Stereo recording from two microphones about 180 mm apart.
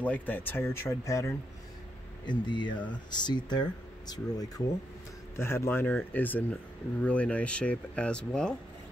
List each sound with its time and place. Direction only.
0.0 s speech: 10° left (ahead or behind)